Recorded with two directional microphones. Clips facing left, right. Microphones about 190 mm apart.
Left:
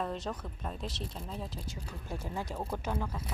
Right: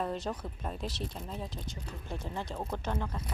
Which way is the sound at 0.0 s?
Centre (ahead or behind).